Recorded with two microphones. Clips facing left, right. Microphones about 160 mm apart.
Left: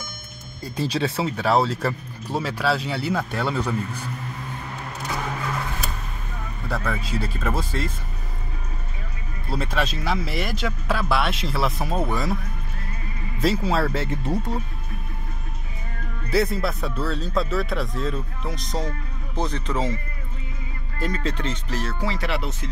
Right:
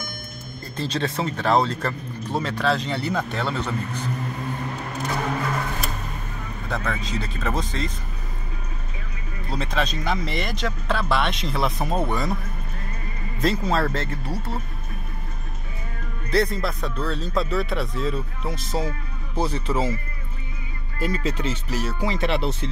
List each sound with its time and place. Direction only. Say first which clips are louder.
0.7 s speech: left 2 dB; 10° left (ahead or behind)
6.7 s speech: left 1 dB; 5° left (ahead or behind)
9.5 s speech: even; 5° left (ahead or behind)
13.4 s speech: even; 5° left (ahead or behind)
14.2 s speech: left 4 dB; 15° left (ahead or behind)
16.3 s speech: even; 5° left (ahead or behind)
21.0 s speech: right 1 dB; 10° right (ahead or behind); by 22.7 s 30° right (ahead or behind)